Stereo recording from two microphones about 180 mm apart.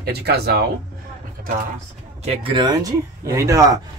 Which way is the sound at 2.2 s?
25° right (ahead or behind).